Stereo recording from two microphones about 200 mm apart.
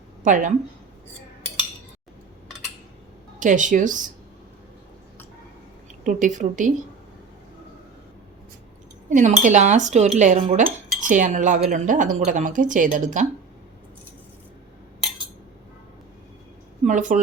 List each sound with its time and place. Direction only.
0.3 s speech: 40° right (ahead or behind)
3.4 s speech: 40° right (ahead or behind)
6.1 s speech: 40° right (ahead or behind)
9.0 s speech: 40° right (ahead or behind)
16.8 s a woman's voice: 40° right (ahead or behind)